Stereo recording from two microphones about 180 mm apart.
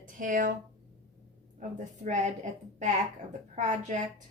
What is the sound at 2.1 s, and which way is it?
Speech, 45° right (ahead or behind).